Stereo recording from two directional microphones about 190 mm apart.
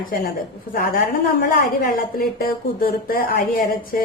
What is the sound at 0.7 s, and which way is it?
A woman's voice, 50° left (ahead or behind).